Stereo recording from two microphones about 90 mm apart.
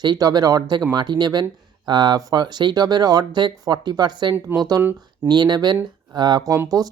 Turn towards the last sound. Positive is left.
turn(degrees=-45)  # may be behind; listen again after turning